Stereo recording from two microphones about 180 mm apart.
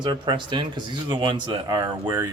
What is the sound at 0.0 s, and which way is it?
Speech, 25° right (ahead or behind).